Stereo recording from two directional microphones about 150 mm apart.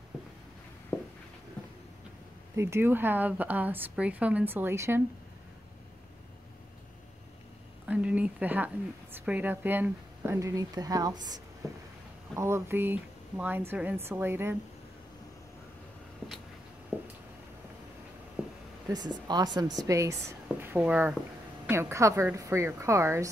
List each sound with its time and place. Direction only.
0.9 s walk: 10° left (ahead or behind)
2.5 s a woman's voice: 15° right (ahead or behind)
7.8 s a woman's voice: 10° right (ahead or behind)
16.9 s a sound: 15° left (ahead or behind)
18.9 s speech: 25° right (ahead or behind)